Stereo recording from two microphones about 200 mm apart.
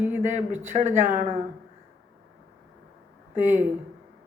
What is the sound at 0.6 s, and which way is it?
Speech, 35° right (ahead or behind).